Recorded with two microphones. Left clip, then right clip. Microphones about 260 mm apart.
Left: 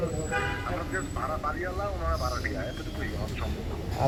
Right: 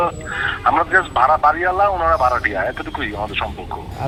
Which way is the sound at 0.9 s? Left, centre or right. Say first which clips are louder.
Right 18 dB; right.